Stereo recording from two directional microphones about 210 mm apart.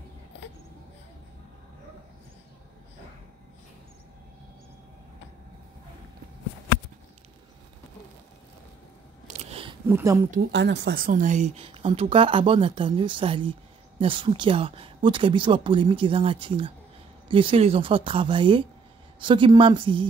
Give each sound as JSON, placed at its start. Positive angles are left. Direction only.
{"t": 9.3, "sound": "a sound", "side_deg": -30}
{"t": 9.8, "sound": "speech", "side_deg": -10}
{"t": 10.5, "sound": "speech", "side_deg": -55}